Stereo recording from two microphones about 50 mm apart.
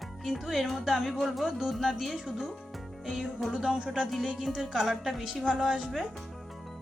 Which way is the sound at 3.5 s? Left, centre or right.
Centre.